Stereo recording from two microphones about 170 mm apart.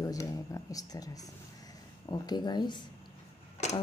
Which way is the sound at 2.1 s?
25° left (ahead or behind).